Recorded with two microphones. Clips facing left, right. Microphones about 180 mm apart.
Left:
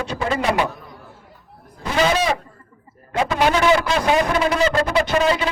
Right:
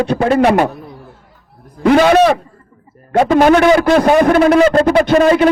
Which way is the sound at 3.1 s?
50° right (ahead or behind).